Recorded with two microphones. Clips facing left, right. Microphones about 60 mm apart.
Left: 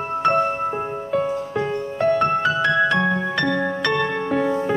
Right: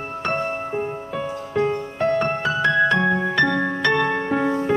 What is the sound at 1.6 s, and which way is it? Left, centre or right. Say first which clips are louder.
Music: right 2 dB; centre.